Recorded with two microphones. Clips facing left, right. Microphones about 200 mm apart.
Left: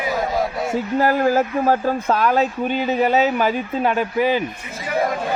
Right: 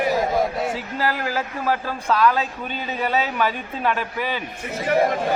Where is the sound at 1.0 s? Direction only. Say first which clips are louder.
Left 8 dB; 45° left (ahead or behind).